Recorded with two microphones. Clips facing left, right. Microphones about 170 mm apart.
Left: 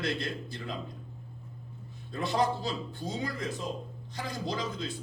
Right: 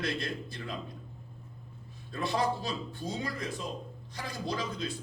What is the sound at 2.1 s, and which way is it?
Speech, 20° left (ahead or behind).